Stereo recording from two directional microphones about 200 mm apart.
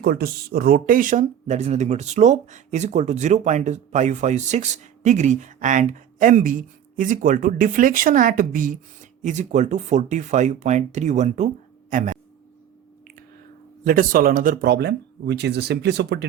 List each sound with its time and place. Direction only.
0.0 s speech: 50° right (ahead or behind)
13.8 s speech: 45° right (ahead or behind)